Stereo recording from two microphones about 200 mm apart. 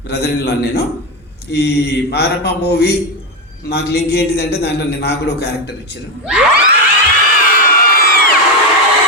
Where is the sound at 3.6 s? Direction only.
55° left (ahead or behind).